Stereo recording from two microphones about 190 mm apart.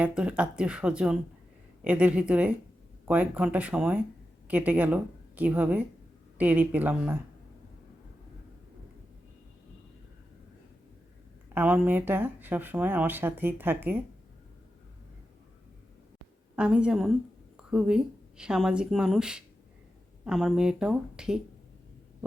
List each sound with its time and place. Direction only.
0.0 s a woman's voice: 5° right (ahead or behind)
11.5 s speech: 10° right (ahead or behind)
16.6 s speech: 5° right (ahead or behind)